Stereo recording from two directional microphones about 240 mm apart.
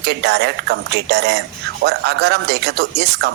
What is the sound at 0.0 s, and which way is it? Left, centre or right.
Speech, right.